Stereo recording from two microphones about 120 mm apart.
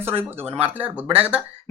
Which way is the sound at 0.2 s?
15° right (ahead or behind).